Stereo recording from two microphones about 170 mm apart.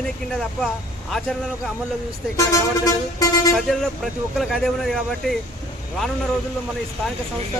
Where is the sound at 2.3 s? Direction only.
20° left (ahead or behind).